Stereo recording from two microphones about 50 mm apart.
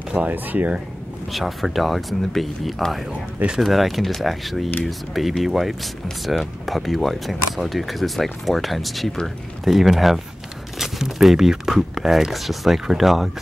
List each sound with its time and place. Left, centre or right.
0.3 s speech: right
1.3 s speech: centre